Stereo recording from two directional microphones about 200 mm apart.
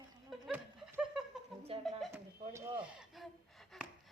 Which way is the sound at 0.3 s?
5° right (ahead or behind).